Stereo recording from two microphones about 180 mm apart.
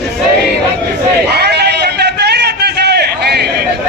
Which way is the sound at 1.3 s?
70° right (ahead or behind).